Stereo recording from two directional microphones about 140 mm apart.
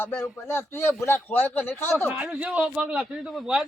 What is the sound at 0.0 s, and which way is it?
A man's voice, 20° left (ahead or behind).